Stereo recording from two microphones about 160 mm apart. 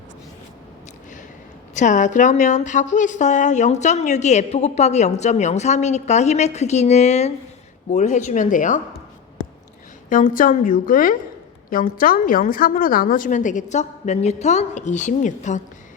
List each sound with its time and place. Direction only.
1.7 s a woman's voice: 50° left (ahead or behind)
10.1 s a woman's voice: 55° left (ahead or behind)